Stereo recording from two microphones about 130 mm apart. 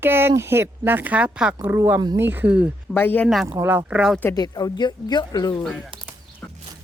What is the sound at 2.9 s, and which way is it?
Speech, 15° left (ahead or behind).